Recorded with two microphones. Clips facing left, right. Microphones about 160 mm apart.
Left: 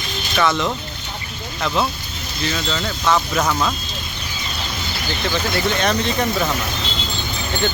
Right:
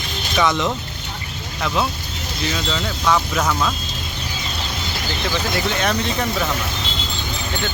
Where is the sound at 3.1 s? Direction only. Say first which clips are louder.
Left 1 dB; 10° left (ahead or behind).